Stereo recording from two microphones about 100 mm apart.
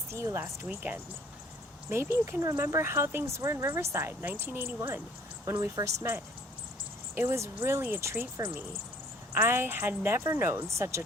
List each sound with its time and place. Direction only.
0.1 s speech: 30° right (ahead or behind)
0.7 s speech: 15° right (ahead or behind)
7.2 s speech: 25° right (ahead or behind)
9.3 s speech: 25° right (ahead or behind)